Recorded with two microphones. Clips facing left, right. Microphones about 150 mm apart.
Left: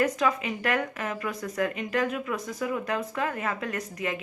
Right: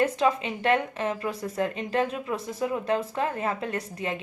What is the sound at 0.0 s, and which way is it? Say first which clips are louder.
A woman's voice: right 2 dB; 30° right (ahead or behind).